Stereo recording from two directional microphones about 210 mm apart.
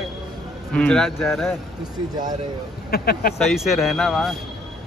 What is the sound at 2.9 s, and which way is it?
Speech, 45° left (ahead or behind).